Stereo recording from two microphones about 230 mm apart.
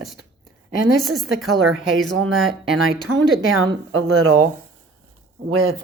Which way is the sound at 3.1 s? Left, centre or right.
Right.